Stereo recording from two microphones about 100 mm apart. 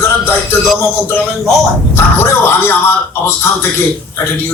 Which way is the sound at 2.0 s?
25° left (ahead or behind).